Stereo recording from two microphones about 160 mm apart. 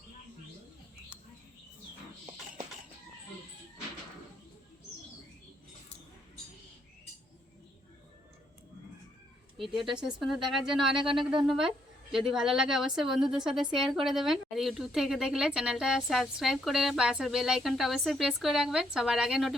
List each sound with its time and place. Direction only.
9.7 s a woman's voice: 5° right (ahead or behind)
11.0 s speech: 30° right (ahead or behind)
11.4 s a woman's voice: 5° right (ahead or behind)